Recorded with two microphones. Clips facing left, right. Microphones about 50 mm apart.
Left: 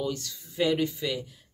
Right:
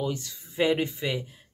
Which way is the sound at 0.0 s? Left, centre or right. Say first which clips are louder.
Right 1 dB; right.